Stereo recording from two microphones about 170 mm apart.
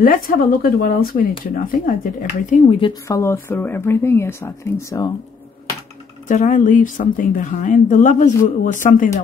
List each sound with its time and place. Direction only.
0.0 s speech: 55° left (ahead or behind)
2.5 s speech: 35° left (ahead or behind)
3.1 s speech: 15° left (ahead or behind)
6.2 s speech: 45° left (ahead or behind)